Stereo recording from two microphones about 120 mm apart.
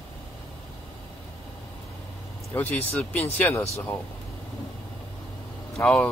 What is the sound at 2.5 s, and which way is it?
Speech, 15° left (ahead or behind).